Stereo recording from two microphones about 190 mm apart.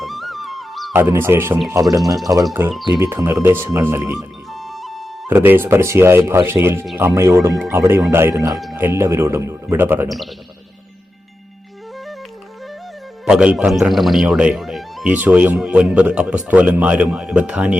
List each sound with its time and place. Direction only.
0.0 s music: centre (ahead or behind)
0.9 s speech: 10° right (ahead or behind)
4.2 s music: centre (ahead or behind)
5.3 s speech: 10° right (ahead or behind)
13.2 s speech: 5° right (ahead or behind)